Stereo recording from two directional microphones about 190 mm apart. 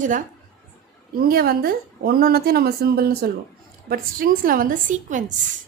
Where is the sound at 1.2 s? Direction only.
50° right (ahead or behind).